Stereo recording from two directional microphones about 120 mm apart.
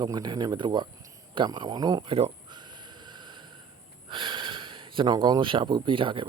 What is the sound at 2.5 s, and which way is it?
Train, 40° right (ahead or behind).